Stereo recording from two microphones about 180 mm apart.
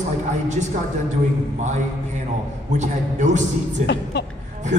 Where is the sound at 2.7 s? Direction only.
40° right (ahead or behind).